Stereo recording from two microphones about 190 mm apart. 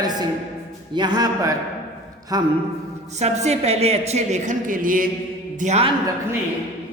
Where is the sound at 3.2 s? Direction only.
35° right (ahead or behind).